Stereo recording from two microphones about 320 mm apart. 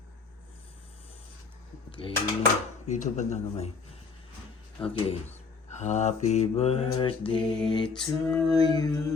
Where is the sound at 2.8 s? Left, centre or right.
Left.